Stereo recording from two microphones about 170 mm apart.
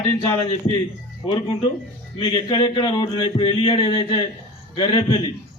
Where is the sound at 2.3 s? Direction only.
30° left (ahead or behind).